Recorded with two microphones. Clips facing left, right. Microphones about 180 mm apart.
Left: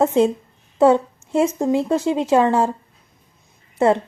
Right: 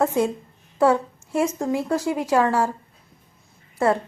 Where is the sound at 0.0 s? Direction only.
25° left (ahead or behind).